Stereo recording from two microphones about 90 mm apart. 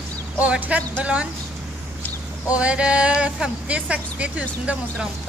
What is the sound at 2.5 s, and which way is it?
Speech, 15° right (ahead or behind).